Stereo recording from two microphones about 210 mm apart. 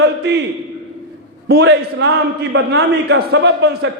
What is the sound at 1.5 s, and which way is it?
A man's voice, 55° right (ahead or behind).